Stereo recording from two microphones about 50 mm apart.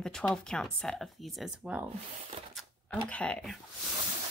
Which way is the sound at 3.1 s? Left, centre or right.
Left.